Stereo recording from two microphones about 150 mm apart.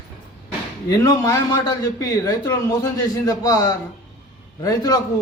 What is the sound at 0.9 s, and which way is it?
A man's voice, 25° left (ahead or behind).